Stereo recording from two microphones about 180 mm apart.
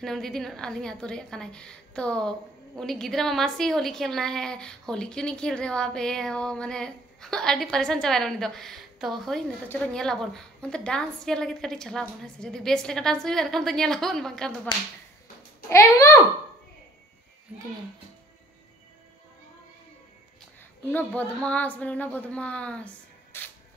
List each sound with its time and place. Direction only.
0.0 s a woman's voice: 5° left (ahead or behind)
15.7 s speech: 15° left (ahead or behind)
20.9 s speech: 10° left (ahead or behind)